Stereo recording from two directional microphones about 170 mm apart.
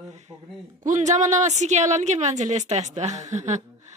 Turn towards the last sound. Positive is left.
turn(degrees=-45)  # may be behind; listen again after turning